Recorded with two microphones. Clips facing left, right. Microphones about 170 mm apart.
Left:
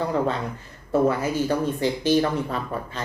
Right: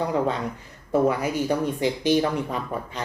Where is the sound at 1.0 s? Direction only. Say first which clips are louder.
Left 2 dB; 15° right (ahead or behind).